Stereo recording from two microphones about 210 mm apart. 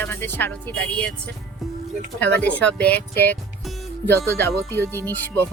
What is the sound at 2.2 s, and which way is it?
Speech, 10° left (ahead or behind).